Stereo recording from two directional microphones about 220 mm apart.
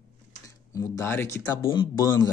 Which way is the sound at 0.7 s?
15° left (ahead or behind).